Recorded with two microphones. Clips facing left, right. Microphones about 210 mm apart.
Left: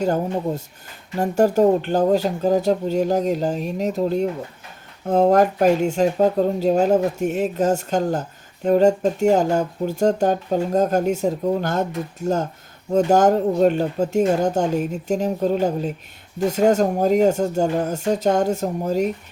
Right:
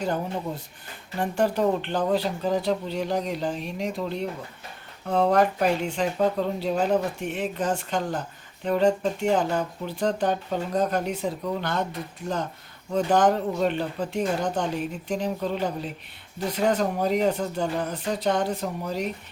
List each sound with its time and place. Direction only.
0.0 s speech: 45° left (ahead or behind)